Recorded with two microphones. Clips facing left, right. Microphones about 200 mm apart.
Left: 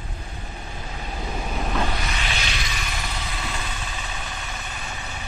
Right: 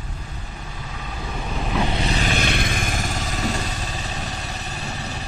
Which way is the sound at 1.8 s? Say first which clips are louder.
Right 4 dB; 25° right (ahead or behind).